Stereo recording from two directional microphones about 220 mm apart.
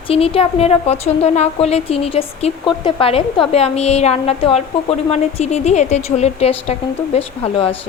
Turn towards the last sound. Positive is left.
turn(degrees=25)  # may be behind; listen again after turning